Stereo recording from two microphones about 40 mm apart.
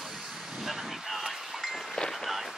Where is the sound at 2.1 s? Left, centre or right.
Centre.